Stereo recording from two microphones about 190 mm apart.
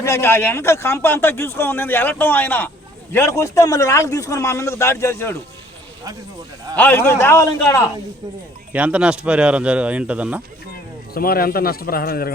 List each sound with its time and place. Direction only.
0.0 s speech: 15° left (ahead or behind)
6.7 s speech: 10° left (ahead or behind)
8.7 s speech: 5° right (ahead or behind)
11.1 s a man's voice: 50° left (ahead or behind)